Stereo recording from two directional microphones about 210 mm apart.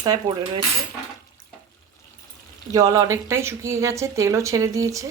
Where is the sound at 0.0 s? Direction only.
20° right (ahead or behind).